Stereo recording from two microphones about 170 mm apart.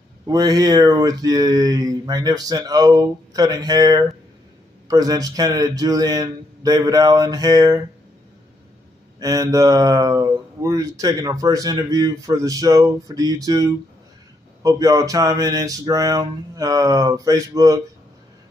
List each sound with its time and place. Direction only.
0.3 s speech: 20° right (ahead or behind)
9.2 s speech: 20° right (ahead or behind)